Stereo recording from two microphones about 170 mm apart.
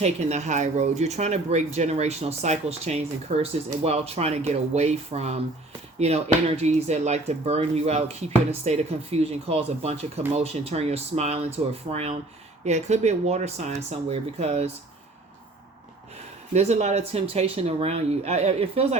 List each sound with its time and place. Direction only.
0.0 s speech: 40° right (ahead or behind)
16.5 s speech: 40° right (ahead or behind)